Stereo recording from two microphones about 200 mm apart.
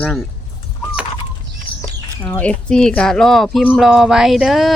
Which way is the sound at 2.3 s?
5° left (ahead or behind).